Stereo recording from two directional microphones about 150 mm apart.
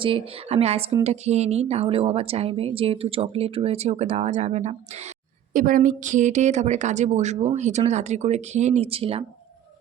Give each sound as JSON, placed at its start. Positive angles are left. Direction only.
{"t": 0.0, "sound": "a woman's voice", "side_deg": -40}
{"t": 5.5, "sound": "a woman's voice", "side_deg": -65}